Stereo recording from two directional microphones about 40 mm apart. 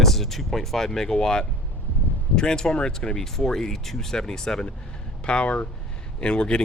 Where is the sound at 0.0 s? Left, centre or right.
Centre; by 3.2 s left.